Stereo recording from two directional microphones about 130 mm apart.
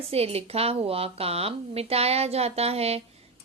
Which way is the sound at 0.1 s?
50° right (ahead or behind).